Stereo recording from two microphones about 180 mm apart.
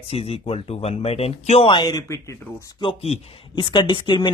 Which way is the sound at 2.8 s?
30° left (ahead or behind).